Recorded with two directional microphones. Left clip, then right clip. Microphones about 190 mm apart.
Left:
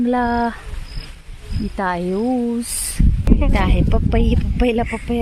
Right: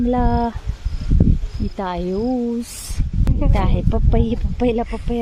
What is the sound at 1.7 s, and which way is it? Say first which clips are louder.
Speech: left 4 dB; 5° left (ahead or behind).